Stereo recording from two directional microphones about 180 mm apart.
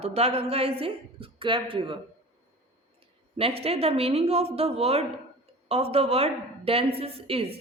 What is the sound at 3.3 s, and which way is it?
Speech, 35° right (ahead or behind).